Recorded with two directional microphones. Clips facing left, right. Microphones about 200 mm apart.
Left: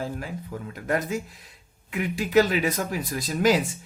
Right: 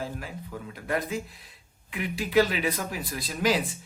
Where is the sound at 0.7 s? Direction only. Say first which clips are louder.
Left 3 dB; 45° left (ahead or behind).